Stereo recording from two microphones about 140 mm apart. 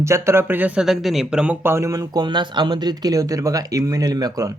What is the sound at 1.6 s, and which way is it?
Speech, 20° right (ahead or behind).